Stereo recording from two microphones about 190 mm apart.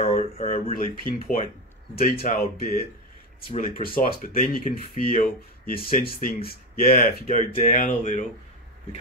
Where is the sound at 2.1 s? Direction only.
50° left (ahead or behind).